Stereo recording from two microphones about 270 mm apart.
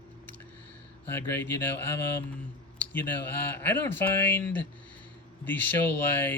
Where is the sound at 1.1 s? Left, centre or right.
Centre.